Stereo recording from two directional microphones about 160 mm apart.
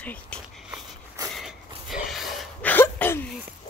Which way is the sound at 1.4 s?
Centre (ahead or behind).